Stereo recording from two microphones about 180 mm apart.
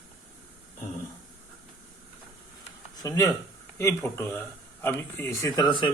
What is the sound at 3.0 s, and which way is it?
Speech, 20° left (ahead or behind).